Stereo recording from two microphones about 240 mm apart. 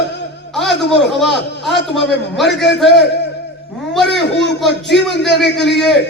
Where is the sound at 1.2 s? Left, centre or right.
Centre.